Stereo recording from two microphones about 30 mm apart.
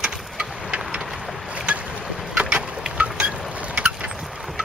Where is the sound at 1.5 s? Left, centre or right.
Right.